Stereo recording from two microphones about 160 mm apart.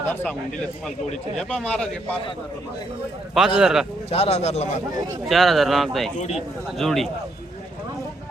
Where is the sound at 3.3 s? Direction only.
5° right (ahead or behind).